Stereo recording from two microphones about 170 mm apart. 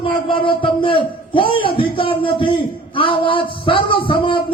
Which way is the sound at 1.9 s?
30° left (ahead or behind).